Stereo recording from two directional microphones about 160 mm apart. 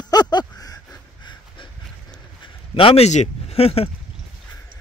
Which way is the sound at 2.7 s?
35° left (ahead or behind).